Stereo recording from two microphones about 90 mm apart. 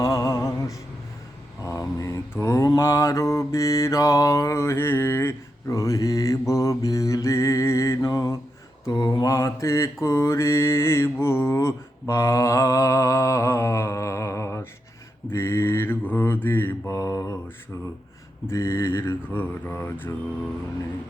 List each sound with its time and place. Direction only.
0.0 s music: 40° left (ahead or behind)
1.6 s a sound: 35° left (ahead or behind)
2.4 s mantra: 35° left (ahead or behind)
8.0 s mantra: 45° left (ahead or behind); by 16.9 s 25° left (ahead or behind)
16.9 s mantra: 40° left (ahead or behind)
18.4 s speech: 30° left (ahead or behind)